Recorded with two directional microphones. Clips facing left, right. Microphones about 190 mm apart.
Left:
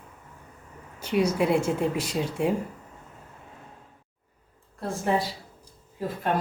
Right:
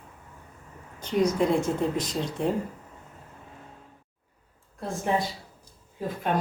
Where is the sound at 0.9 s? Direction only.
10° left (ahead or behind).